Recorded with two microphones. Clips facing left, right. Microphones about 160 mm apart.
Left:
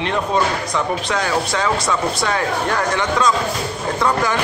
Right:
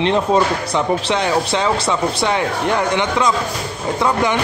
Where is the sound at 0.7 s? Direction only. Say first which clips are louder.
Right 5 dB; 25° right (ahead or behind).